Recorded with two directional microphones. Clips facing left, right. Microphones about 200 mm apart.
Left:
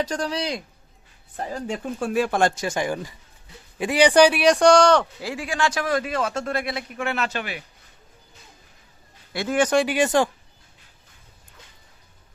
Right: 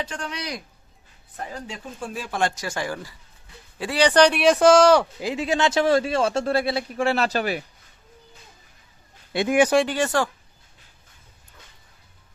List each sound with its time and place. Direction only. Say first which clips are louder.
0.0 s speech: left 6 dB; 40° left (ahead or behind)
1.6 s speech: left 8 dB; 50° left (ahead or behind)
2.0 s speech: left 9 dB; 70° left (ahead or behind)
2.6 s speech: left 4 dB; 20° left (ahead or behind); by 5.0 s 5° right (ahead or behind)
5.2 s a man's voice: right 3 dB; 20° right (ahead or behind); by 7.6 s 40° right (ahead or behind)
9.3 s speech: right 3 dB; 15° right (ahead or behind)
9.7 s speech: left 1 dB; 10° left (ahead or behind)